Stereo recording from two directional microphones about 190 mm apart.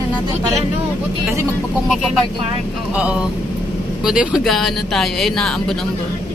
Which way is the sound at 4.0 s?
5° right (ahead or behind).